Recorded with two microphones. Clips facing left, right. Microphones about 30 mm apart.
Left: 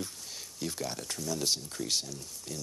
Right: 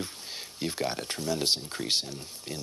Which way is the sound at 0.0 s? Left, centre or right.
Right.